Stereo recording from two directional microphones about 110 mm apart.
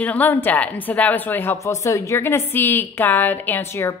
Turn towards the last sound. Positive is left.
turn(degrees=25)  # may be behind; listen again after turning